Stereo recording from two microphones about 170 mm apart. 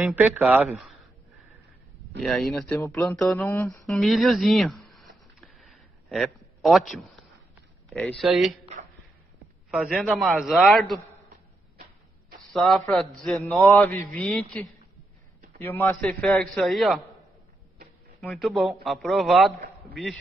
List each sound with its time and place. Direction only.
0.0 s a man's voice: 10° right (ahead or behind)
2.2 s a man's voice: centre (ahead or behind)
3.0 s mantra: 15° left (ahead or behind)
3.8 s a sound: centre (ahead or behind)
6.9 s a man's voice: centre (ahead or behind)
9.7 s a man's voice: 5° right (ahead or behind)
12.5 s a man's voice: centre (ahead or behind)
13.7 s mantra: 10° left (ahead or behind)
15.6 s a man's voice: 10° left (ahead or behind)
18.2 s a man's voice: centre (ahead or behind)